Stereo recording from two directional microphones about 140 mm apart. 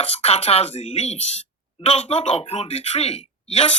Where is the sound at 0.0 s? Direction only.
50° left (ahead or behind).